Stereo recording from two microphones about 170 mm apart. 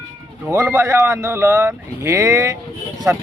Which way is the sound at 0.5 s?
15° right (ahead or behind).